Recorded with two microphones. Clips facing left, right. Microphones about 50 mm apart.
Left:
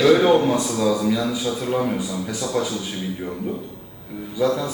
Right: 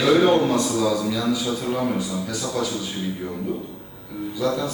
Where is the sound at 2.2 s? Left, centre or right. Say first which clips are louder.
Left 2 dB; left.